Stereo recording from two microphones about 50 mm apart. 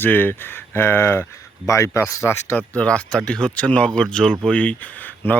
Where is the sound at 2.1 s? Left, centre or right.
Left.